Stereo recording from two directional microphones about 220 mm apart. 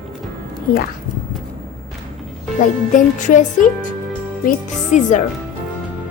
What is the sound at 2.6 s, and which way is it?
Music, 35° left (ahead or behind).